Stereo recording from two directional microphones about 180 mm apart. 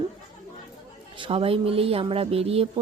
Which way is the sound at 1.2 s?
30° right (ahead or behind).